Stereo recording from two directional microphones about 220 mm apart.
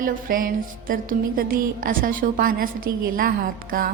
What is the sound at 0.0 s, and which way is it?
A woman's voice, 40° right (ahead or behind).